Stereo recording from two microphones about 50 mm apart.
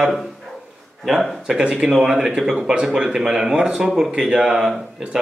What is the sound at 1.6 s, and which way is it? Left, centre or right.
Speech, centre.